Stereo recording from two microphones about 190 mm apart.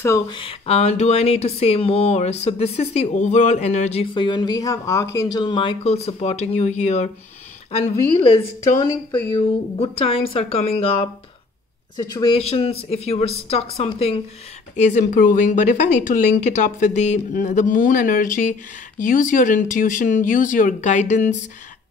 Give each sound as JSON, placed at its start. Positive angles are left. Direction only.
{"t": 0.0, "sound": "speech", "side_deg": 15}
{"t": 0.4, "sound": "speech", "side_deg": 30}
{"t": 12.0, "sound": "speech", "side_deg": 20}
{"t": 14.9, "sound": "speech", "side_deg": 40}